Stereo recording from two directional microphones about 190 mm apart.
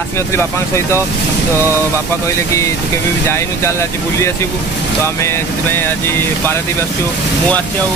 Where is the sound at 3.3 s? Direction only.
15° left (ahead or behind).